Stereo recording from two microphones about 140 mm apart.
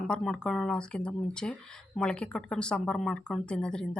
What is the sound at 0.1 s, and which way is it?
Speech, 5° left (ahead or behind).